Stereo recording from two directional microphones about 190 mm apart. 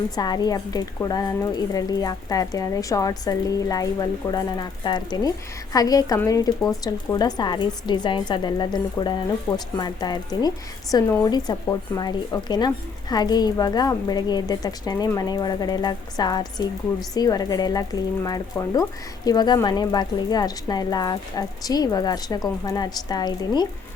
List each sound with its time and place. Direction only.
0.2 s speech: 20° left (ahead or behind)